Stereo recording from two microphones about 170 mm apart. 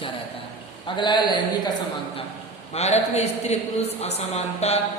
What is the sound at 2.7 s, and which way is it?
A woman's voice, 40° left (ahead or behind).